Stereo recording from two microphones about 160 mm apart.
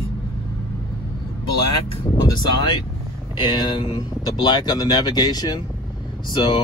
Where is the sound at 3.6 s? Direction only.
30° left (ahead or behind).